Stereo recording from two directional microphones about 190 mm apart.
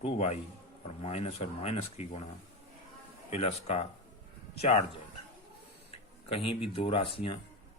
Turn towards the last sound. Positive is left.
turn(degrees=30)  # may be behind; listen again after turning